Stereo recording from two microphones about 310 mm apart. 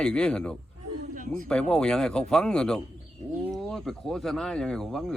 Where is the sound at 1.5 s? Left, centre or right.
Centre.